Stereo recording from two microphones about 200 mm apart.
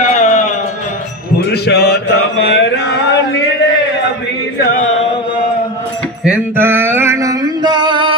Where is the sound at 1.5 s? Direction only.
55° left (ahead or behind).